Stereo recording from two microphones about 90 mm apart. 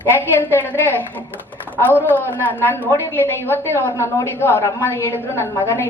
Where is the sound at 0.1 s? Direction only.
20° left (ahead or behind).